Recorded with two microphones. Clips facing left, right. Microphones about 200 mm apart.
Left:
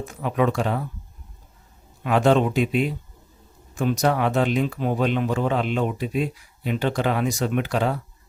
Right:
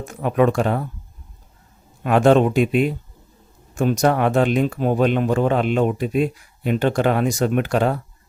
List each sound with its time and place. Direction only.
0.0 s speech: 50° right (ahead or behind)
2.0 s speech: 50° right (ahead or behind)